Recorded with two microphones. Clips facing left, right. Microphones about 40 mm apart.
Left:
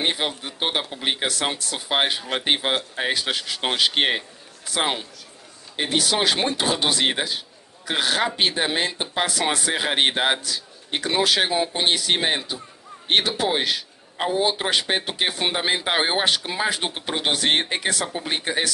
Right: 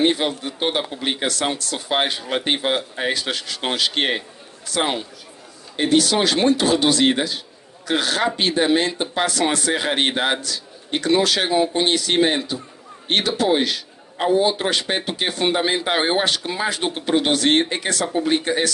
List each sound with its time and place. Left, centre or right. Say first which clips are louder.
0.0 s a man's voice: right 5 dB; centre